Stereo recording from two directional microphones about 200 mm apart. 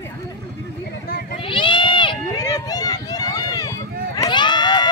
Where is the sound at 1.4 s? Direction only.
25° left (ahead or behind).